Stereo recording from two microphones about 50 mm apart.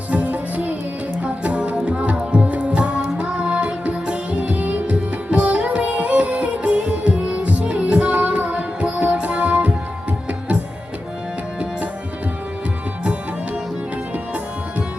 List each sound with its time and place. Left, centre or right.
0.1 s music: right